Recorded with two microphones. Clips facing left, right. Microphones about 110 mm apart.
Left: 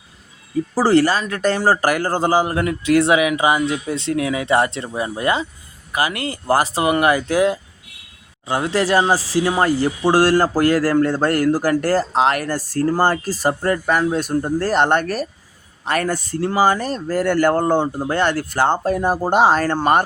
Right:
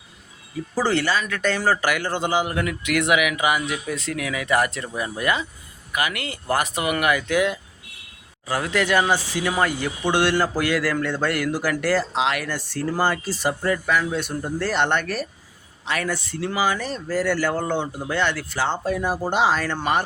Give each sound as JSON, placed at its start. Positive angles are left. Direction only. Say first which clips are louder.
{"t": 0.8, "sound": "speech", "louder": "left 6 dB", "side_deg": 35}